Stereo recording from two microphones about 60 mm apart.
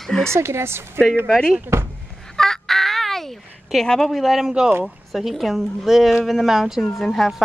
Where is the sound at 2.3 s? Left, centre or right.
Centre.